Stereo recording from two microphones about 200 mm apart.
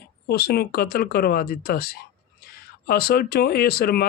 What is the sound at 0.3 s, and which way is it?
Speech, 50° left (ahead or behind).